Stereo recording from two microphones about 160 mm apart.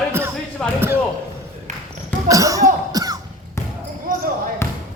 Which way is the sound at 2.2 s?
20° right (ahead or behind).